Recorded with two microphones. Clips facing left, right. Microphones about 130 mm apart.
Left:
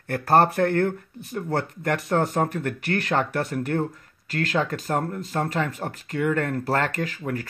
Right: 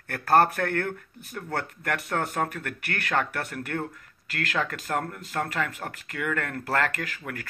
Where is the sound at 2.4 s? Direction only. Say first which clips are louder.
Left 5 dB; 25° left (ahead or behind).